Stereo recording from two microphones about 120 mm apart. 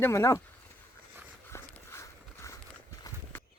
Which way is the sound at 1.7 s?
20° left (ahead or behind).